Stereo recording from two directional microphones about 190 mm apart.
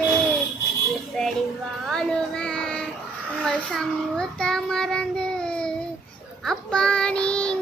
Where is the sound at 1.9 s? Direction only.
Centre (ahead or behind).